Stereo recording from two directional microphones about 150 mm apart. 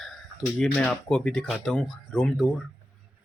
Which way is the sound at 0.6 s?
5° left (ahead or behind).